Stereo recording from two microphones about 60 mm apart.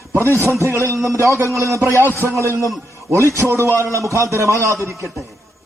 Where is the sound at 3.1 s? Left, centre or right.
Right.